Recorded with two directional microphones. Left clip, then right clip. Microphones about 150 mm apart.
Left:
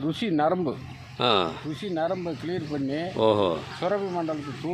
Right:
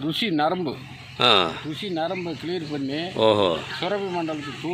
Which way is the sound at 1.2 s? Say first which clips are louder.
Right 5 dB; 10° left (ahead or behind).